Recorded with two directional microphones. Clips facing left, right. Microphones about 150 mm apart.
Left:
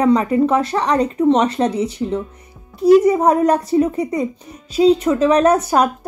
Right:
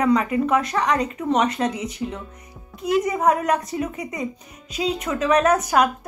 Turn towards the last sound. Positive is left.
turn(degrees=30)  # may be behind; listen again after turning